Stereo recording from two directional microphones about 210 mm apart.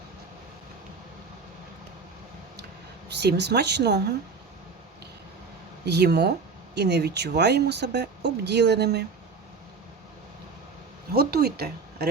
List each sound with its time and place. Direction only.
3.1 s speech: 50° right (ahead or behind)
5.8 s speech: 50° right (ahead or behind)
11.1 s speech: 50° right (ahead or behind)